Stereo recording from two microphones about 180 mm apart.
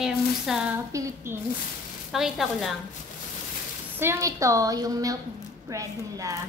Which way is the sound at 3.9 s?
15° right (ahead or behind).